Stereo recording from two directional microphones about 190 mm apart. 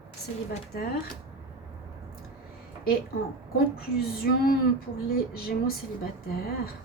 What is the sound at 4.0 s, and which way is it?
A woman's voice, 50° left (ahead or behind).